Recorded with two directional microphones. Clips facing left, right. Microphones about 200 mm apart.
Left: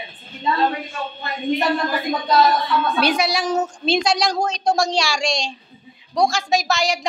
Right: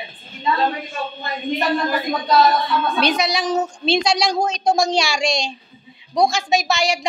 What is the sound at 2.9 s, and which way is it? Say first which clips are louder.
A woman's voice: even; 10° left (ahead or behind).